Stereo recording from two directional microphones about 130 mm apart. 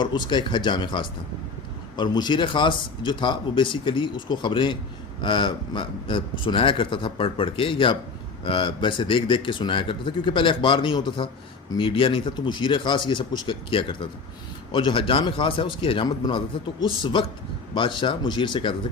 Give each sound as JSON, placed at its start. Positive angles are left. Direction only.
{"t": 0.0, "sound": "speech", "side_deg": 35}